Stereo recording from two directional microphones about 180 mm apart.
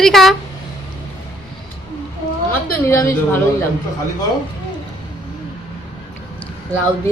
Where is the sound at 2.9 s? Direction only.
15° left (ahead or behind).